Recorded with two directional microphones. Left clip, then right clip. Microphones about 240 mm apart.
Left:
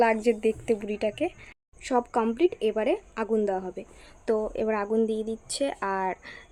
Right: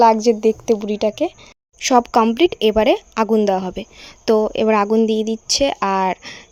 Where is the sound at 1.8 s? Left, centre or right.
Right.